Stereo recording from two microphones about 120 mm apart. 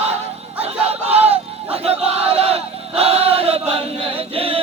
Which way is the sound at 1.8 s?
55° right (ahead or behind).